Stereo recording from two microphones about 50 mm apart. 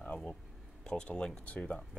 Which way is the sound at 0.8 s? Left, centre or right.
Centre.